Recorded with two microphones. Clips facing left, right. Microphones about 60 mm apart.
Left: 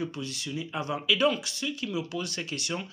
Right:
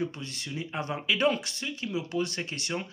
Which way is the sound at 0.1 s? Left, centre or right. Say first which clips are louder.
Left 3 dB; right.